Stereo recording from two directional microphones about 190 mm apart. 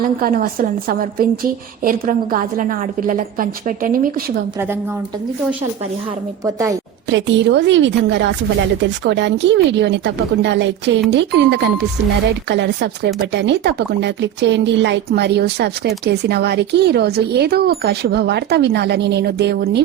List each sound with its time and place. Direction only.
0.2 s a woman's voice: 50° right (ahead or behind)
6.4 s a woman's voice: 15° right (ahead or behind)
7.1 s speech: 70° right (ahead or behind)